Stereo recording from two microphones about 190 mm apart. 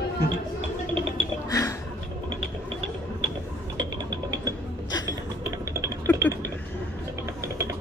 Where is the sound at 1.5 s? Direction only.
15° left (ahead or behind).